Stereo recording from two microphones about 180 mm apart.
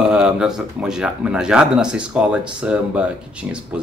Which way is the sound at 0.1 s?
5° right (ahead or behind).